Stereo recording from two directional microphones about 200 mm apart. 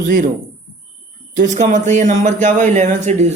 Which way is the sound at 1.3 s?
40° right (ahead or behind).